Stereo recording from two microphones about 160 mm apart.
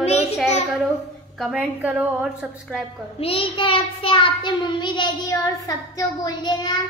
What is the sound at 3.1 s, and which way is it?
Child singing, 35° left (ahead or behind).